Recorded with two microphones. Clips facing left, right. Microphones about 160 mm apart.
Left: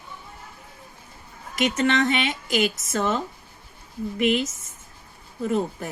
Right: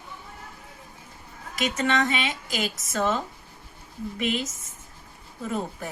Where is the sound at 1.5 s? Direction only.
55° left (ahead or behind).